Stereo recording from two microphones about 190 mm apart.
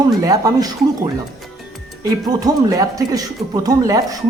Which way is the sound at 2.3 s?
20° right (ahead or behind).